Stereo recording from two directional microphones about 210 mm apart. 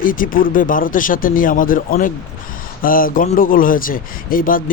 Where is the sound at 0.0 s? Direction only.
40° left (ahead or behind).